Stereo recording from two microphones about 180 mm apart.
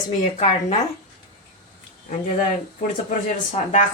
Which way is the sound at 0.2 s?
35° left (ahead or behind).